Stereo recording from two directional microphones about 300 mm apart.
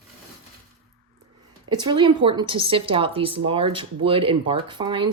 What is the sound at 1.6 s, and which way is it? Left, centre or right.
A woman's voice, centre.